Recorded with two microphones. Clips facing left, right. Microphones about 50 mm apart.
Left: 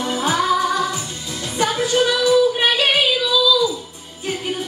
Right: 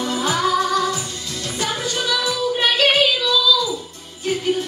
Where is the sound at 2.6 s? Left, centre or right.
Centre.